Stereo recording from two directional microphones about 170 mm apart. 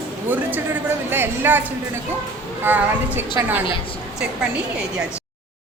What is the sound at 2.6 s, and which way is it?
Speech, 10° right (ahead or behind).